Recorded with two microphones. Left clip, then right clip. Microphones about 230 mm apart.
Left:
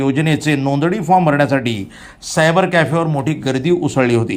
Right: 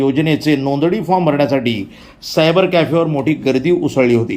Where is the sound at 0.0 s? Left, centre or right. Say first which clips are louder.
Right 2 dB; centre.